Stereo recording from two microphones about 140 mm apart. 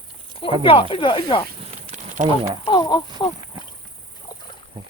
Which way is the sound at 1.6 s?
60° right (ahead or behind).